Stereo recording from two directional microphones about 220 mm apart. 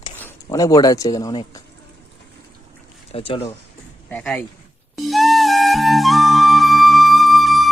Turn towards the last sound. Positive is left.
turn(degrees=0)  # may be behind; listen again after turning